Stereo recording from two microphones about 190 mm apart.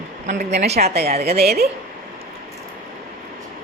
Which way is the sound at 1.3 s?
55° right (ahead or behind).